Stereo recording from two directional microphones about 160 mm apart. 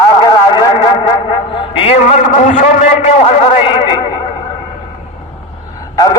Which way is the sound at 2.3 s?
50° left (ahead or behind).